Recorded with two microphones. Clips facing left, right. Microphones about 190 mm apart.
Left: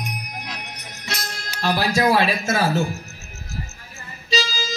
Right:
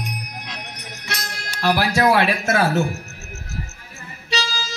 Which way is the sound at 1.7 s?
65° right (ahead or behind).